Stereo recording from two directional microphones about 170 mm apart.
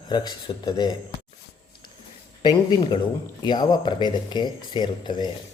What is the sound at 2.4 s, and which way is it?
Speech, 25° left (ahead or behind).